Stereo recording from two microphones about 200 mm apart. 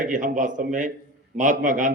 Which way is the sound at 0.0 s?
40° right (ahead or behind).